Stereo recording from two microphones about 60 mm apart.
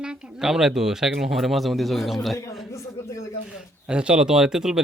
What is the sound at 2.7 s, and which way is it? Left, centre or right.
Speech, left.